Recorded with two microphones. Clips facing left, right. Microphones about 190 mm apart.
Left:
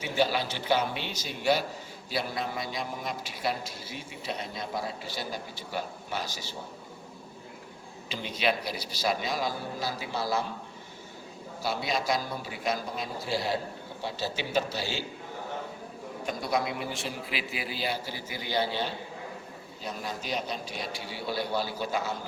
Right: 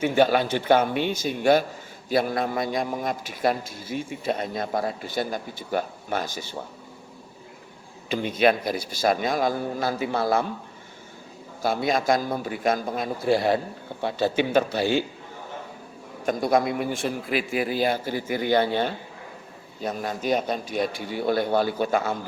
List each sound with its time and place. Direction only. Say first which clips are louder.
0.0 s a man's voice: right 8 dB; 55° right (ahead or behind)
8.1 s a man's voice: right 9 dB; 50° right (ahead or behind)
11.6 s a man's voice: right 7 dB; 50° right (ahead or behind)
16.2 s a man's voice: right 8 dB; 50° right (ahead or behind)